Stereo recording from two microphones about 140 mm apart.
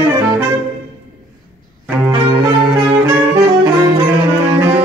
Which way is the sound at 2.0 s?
15° right (ahead or behind).